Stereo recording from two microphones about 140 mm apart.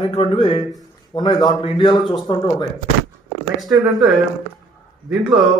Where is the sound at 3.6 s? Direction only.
Centre (ahead or behind).